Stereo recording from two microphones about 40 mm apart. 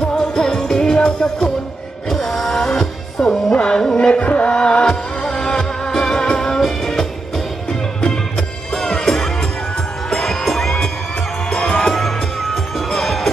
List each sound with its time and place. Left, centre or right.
0.1 s music: centre
2.0 s music: centre
3.5 s music: left
4.1 s music: left; by 10.7 s centre
11.8 s music: centre